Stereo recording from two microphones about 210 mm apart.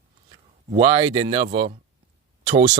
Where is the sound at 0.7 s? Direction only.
20° right (ahead or behind).